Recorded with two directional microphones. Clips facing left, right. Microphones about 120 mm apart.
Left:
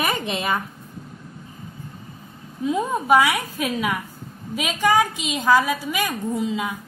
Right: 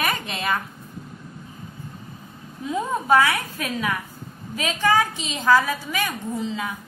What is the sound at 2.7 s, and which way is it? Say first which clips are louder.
A woman's voice: left 1 dB; 10° left (ahead or behind).